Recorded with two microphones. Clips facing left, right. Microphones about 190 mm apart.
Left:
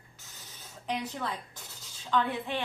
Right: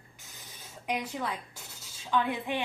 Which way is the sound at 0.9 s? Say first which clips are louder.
Right 1 dB; 10° right (ahead or behind).